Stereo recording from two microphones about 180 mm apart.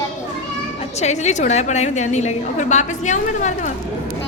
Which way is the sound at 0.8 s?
40° left (ahead or behind).